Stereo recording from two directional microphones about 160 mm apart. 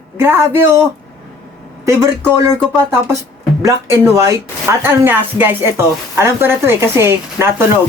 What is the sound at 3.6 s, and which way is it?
Speech, 20° right (ahead or behind).